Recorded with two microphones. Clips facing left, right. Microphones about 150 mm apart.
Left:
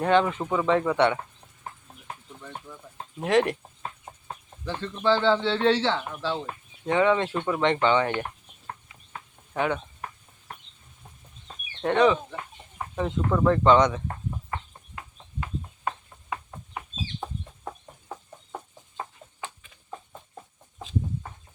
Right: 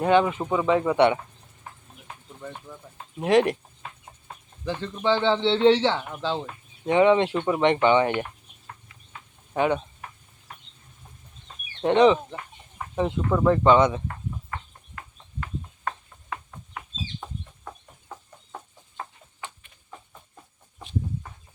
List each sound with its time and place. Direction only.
0.0 s speech: 15° right (ahead or behind)
3.2 s speech: 15° right (ahead or behind)
4.6 s speech: 15° right (ahead or behind)
9.5 s speech: 20° right (ahead or behind)
11.8 s speech: 15° right (ahead or behind)
14.9 s a sound: 15° left (ahead or behind)
16.3 s chicken: 20° left (ahead or behind)